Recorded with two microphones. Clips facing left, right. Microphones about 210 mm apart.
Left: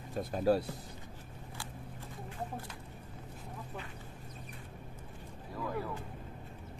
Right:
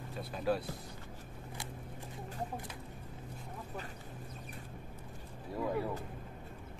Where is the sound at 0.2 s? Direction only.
45° left (ahead or behind).